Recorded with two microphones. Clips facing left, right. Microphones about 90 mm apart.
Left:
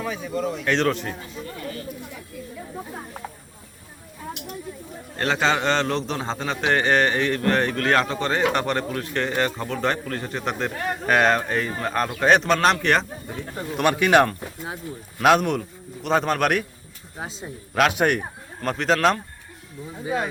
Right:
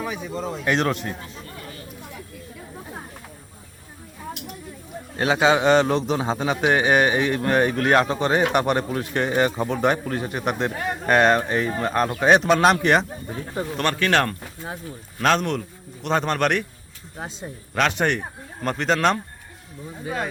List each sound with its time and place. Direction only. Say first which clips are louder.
0.0 s speech: left 2 dB; 15° right (ahead or behind)
0.6 s a man's voice: right 1 dB; 10° right (ahead or behind)
5.1 s a man's voice: right 3 dB; 10° right (ahead or behind)
13.7 s a man's voice: left 4 dB; 10° left (ahead or behind)
17.7 s a man's voice: left 2 dB; 5° left (ahead or behind)